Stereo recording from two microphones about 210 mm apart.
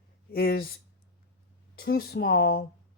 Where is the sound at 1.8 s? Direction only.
45° left (ahead or behind).